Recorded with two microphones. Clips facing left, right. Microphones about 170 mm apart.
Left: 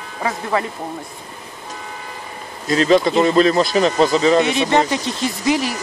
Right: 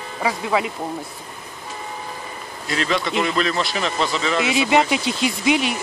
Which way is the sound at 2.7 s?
40° left (ahead or behind).